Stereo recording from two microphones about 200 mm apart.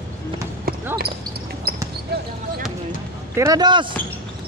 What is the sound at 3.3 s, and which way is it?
Speech, 15° right (ahead or behind).